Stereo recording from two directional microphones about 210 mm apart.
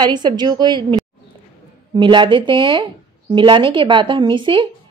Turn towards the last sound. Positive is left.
turn(degrees=-25)  # may be behind; listen again after turning